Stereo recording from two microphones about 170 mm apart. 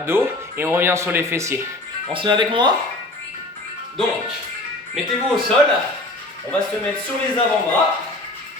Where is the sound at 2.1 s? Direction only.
30° right (ahead or behind).